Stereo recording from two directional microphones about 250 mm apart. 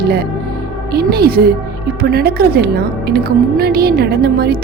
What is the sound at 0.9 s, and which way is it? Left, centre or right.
A woman's voice, right.